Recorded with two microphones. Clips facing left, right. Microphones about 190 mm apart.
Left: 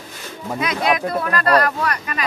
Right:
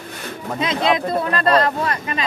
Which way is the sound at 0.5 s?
25° right (ahead or behind).